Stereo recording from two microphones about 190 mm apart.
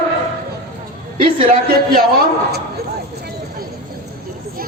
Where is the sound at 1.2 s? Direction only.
55° right (ahead or behind).